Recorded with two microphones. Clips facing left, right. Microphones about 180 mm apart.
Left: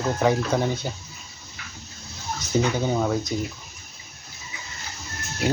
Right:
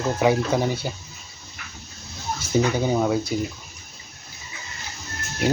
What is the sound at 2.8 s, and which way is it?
Chicken, 10° right (ahead or behind).